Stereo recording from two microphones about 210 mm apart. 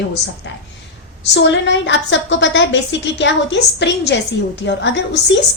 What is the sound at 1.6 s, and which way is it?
A woman's voice, 60° left (ahead or behind).